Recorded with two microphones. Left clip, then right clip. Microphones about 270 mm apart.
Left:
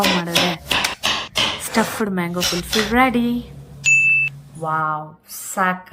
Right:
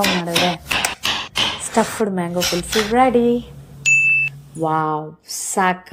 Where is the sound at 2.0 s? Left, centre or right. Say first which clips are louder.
Right 2 dB; centre.